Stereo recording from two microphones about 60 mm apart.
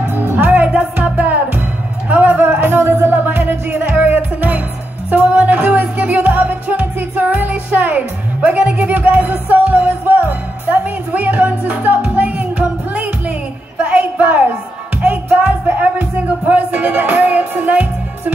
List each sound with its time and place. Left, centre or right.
0.1 s music: right